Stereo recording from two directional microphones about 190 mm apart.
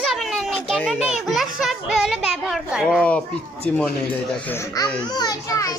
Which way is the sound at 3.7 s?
5° left (ahead or behind).